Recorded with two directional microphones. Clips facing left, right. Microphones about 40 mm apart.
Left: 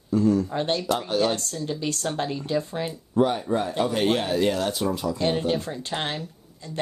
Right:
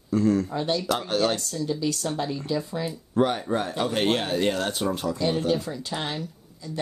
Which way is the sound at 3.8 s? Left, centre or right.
Right.